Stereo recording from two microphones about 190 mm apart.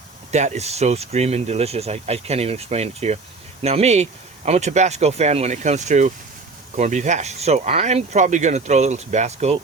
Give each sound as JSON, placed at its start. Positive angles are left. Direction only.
{"t": 0.3, "sound": "speech", "side_deg": -35}